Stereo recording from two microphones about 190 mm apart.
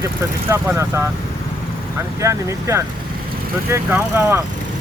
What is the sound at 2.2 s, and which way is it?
Speech, 15° right (ahead or behind).